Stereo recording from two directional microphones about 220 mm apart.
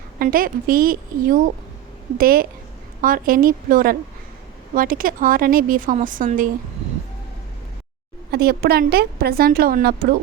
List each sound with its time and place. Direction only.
0.2 s speech: 40° right (ahead or behind)
8.3 s a woman's voice: 45° right (ahead or behind)